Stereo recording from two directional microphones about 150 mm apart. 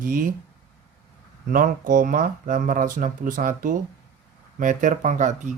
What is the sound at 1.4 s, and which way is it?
Speech, 65° right (ahead or behind).